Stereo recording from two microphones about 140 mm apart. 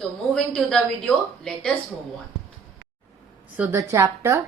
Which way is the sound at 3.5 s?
10° right (ahead or behind).